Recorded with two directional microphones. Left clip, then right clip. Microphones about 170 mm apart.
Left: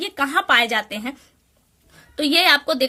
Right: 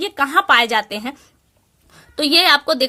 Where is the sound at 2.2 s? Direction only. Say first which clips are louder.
Right 3 dB; 35° right (ahead or behind).